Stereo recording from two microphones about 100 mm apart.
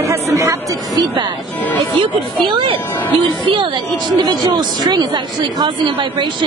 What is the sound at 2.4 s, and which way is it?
Speech, 50° right (ahead or behind).